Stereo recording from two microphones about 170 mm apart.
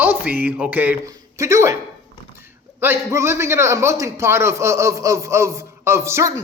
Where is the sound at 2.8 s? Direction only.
15° right (ahead or behind).